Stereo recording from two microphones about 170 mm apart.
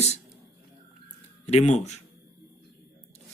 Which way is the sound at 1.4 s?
40° left (ahead or behind).